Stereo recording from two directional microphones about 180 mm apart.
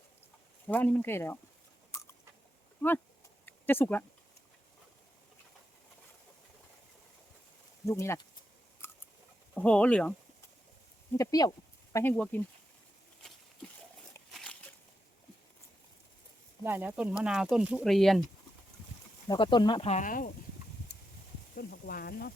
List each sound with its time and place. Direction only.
0.7 s speech: 10° left (ahead or behind)
3.4 s a sound: 10° left (ahead or behind)
7.9 s speech: 15° left (ahead or behind)
8.8 s camera: 15° left (ahead or behind)
9.6 s speech: 5° left (ahead or behind)
11.2 s speech: 20° left (ahead or behind)
11.9 s speech: 10° left (ahead or behind)
13.2 s a sound: 5° left (ahead or behind)
16.6 s speech: 10° right (ahead or behind)
19.3 s speech: 25° left (ahead or behind)
19.9 s speech: 45° left (ahead or behind)
21.5 s speech: 60° left (ahead or behind)